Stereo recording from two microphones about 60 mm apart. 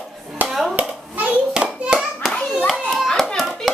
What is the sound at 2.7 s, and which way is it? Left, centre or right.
Children playing, centre.